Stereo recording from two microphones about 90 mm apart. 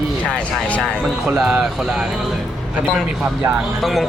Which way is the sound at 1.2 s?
5° right (ahead or behind).